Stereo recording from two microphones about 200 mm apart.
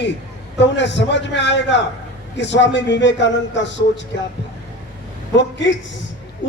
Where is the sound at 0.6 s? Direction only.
60° left (ahead or behind).